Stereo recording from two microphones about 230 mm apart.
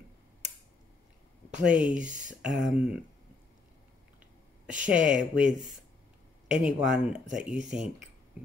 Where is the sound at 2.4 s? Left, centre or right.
Centre.